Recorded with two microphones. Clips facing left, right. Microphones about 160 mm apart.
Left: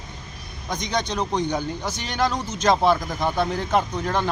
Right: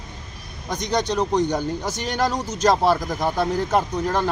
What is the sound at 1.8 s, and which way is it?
Speech, 45° right (ahead or behind).